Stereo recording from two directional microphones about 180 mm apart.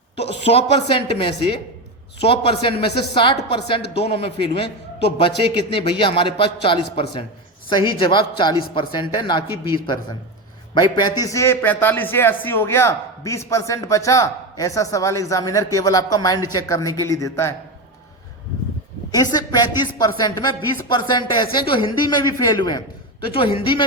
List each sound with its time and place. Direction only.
0.4 s a woman's voice: 35° left (ahead or behind); by 17.5 s 15° left (ahead or behind)
19.1 s a man's voice: 20° left (ahead or behind)